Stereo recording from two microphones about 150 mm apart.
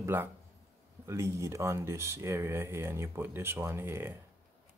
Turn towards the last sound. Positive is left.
turn(degrees=-15)  # may be behind; listen again after turning